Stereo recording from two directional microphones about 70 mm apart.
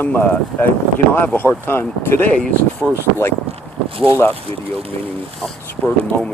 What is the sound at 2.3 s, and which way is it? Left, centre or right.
Speech, centre.